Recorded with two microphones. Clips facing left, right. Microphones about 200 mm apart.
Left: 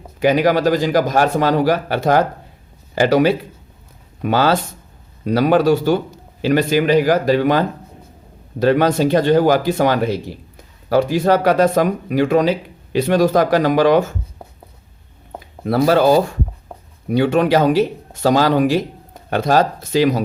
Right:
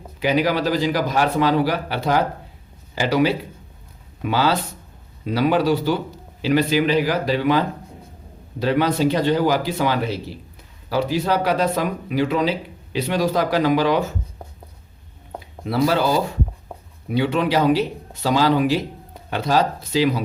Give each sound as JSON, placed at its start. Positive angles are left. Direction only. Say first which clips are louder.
{"t": 0.2, "sound": "speech", "louder": "left 5 dB", "side_deg": 50}
{"t": 15.6, "sound": "speech", "louder": "left 6 dB", "side_deg": 50}